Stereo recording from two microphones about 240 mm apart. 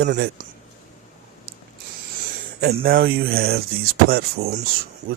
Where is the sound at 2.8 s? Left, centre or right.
Right.